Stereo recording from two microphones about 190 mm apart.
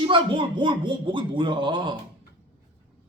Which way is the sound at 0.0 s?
25° right (ahead or behind).